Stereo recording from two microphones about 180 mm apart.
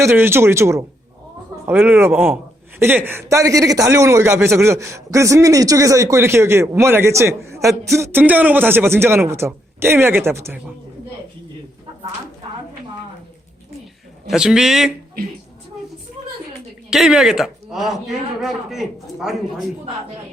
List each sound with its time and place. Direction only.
0.0 s a man's voice: 15° right (ahead or behind)
14.3 s a man's voice: 5° right (ahead or behind)
16.9 s a man's voice: centre (ahead or behind)